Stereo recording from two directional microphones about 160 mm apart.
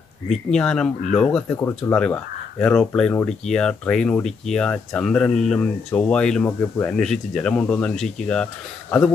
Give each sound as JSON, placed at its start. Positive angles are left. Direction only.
{"t": 0.3, "sound": "speech", "side_deg": 5}